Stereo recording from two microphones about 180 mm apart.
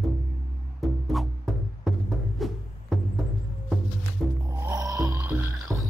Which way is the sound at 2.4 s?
Centre (ahead or behind).